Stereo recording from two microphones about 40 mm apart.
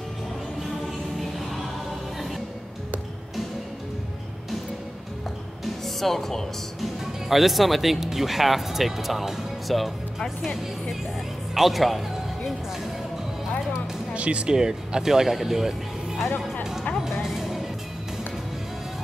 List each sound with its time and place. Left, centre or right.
5.9 s speech: centre
14.1 s speech: right
14.5 s speech: centre
17.0 s music: centre